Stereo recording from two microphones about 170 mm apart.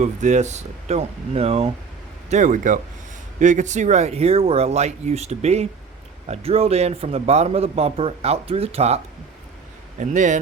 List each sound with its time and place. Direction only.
0.0 s speech: 45° right (ahead or behind)
2.3 s speech: 50° right (ahead or behind)
10.0 s speech: 45° right (ahead or behind)